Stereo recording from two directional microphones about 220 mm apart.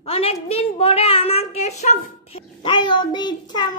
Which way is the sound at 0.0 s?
25° left (ahead or behind).